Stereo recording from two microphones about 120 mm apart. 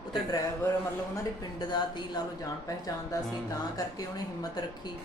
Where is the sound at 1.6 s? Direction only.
40° left (ahead or behind).